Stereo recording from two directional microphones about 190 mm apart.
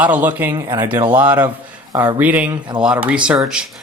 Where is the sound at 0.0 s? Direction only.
10° right (ahead or behind).